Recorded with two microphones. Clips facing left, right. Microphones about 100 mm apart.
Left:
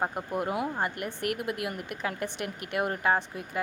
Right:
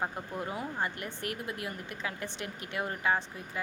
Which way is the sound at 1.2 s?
65° left (ahead or behind).